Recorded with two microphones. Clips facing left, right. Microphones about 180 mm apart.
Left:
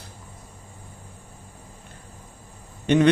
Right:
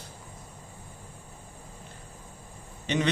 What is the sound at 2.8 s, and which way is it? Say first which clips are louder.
Speech: left 10 dB; 55° left (ahead or behind).